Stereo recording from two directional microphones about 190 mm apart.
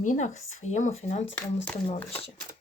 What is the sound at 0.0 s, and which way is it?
Speech, 40° left (ahead or behind).